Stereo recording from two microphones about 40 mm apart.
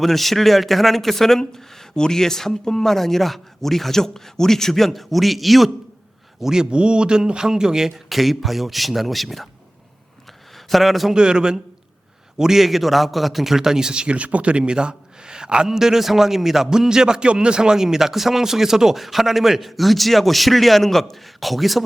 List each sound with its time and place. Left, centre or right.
0.0 s speech: centre
6.4 s a man's voice: centre
10.2 s a sound: centre
11.1 s a man's voice: right
12.4 s a man's voice: centre